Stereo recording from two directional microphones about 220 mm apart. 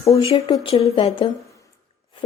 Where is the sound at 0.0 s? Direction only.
25° left (ahead or behind).